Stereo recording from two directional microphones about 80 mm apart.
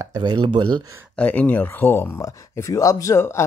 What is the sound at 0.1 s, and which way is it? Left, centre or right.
Speech, right.